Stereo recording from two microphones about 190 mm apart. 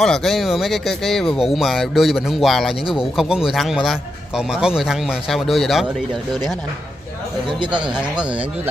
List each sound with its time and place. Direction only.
0.0 s speech: centre (ahead or behind)
7.6 s speech: 25° right (ahead or behind)